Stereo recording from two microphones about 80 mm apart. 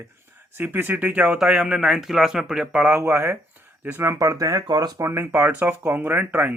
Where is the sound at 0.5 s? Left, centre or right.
Right; by 3.0 s centre.